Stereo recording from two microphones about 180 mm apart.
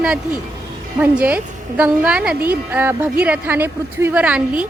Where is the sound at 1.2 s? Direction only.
10° right (ahead or behind).